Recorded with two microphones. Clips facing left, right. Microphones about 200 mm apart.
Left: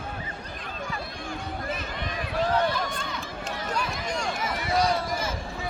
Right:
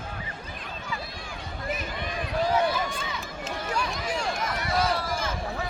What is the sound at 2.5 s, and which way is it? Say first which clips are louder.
Run: even; 5° right (ahead or behind).